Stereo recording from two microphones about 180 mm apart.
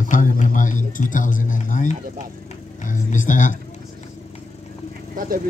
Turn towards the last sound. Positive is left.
turn(degrees=-50)  # may be behind; listen again after turning